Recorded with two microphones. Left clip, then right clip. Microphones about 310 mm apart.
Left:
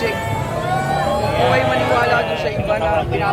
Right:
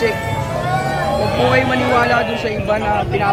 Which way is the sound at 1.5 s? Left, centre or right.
Right.